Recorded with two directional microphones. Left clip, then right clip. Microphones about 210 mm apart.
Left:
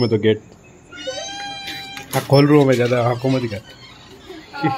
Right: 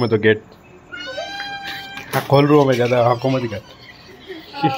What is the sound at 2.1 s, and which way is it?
A woman's voice, 20° left (ahead or behind).